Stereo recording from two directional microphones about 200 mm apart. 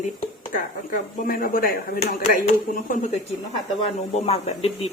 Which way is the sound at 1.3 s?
45° left (ahead or behind).